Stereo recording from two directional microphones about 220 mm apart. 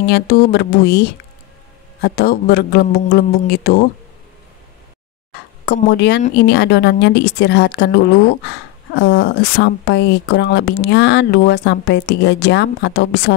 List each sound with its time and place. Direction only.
0.0 s speech: 45° left (ahead or behind)
2.0 s speech: 45° left (ahead or behind)
5.7 s speech: 50° left (ahead or behind)